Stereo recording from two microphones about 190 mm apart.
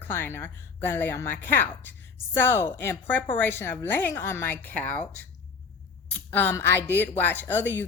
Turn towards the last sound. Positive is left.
turn(degrees=10)  # may be behind; listen again after turning